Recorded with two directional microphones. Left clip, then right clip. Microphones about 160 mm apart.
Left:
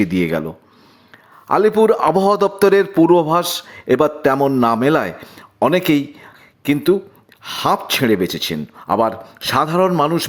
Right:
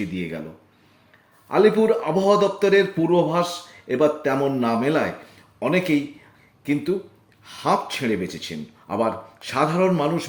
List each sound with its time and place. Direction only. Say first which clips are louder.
0.0 s a man's voice: left 12 dB; 45° left (ahead or behind)
1.5 s a man's voice: left 4 dB; 45° left (ahead or behind)